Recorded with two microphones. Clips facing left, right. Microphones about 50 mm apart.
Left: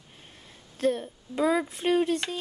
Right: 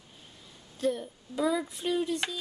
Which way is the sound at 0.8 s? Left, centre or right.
Left.